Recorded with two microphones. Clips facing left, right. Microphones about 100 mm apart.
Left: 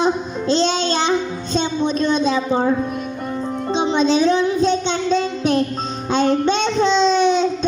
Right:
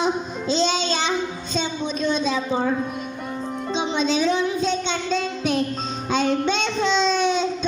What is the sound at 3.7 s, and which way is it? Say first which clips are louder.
Music: left 6 dB; 40° left (ahead or behind).